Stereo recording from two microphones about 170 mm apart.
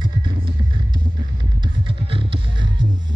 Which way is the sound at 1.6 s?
30° right (ahead or behind).